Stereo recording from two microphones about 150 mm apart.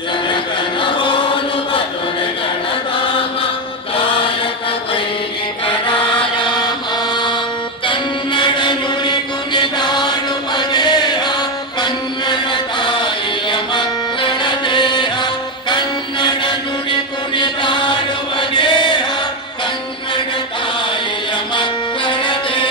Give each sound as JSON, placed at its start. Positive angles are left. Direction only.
{"t": 0.3, "sound": "chant", "side_deg": 35}
{"t": 6.4, "sound": "chant", "side_deg": 30}
{"t": 7.8, "sound": "music", "side_deg": 30}
{"t": 12.8, "sound": "music", "side_deg": 30}
{"t": 15.7, "sound": "mantra", "side_deg": 30}
{"t": 18.5, "sound": "chant", "side_deg": 30}
{"t": 21.5, "sound": "music", "side_deg": 30}